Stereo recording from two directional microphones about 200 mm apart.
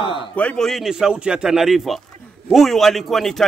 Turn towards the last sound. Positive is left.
turn(degrees=0)  # may be behind; listen again after turning